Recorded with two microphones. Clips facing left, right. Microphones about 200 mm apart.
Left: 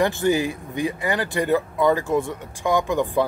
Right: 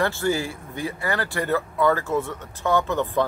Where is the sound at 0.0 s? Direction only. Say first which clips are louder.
Left 4 dB; 15° left (ahead or behind).